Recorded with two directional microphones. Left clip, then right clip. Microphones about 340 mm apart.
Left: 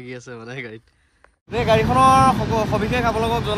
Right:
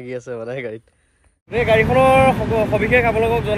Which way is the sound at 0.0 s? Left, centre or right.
Centre.